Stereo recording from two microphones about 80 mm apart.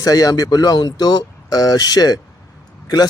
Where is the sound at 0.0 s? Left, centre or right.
Left.